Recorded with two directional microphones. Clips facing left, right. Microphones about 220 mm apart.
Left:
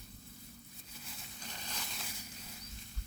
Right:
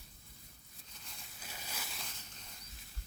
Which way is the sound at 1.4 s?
10° right (ahead or behind).